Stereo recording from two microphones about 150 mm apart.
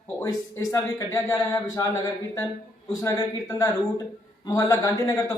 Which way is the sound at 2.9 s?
25° left (ahead or behind).